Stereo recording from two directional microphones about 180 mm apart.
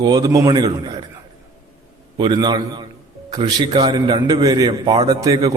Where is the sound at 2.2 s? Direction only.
25° right (ahead or behind).